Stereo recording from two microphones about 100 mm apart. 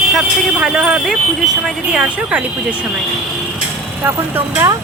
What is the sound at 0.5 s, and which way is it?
A woman's voice, 10° right (ahead or behind).